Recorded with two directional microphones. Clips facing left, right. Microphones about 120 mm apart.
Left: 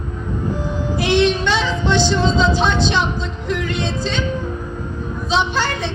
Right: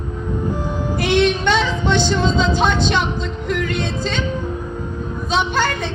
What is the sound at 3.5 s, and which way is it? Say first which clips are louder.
Music: even; 50° right (ahead or behind).